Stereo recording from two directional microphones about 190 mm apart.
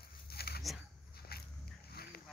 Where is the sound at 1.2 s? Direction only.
55° left (ahead or behind).